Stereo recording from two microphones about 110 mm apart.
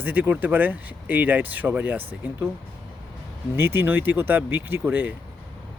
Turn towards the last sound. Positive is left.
turn(degrees=-15)  # may be behind; listen again after turning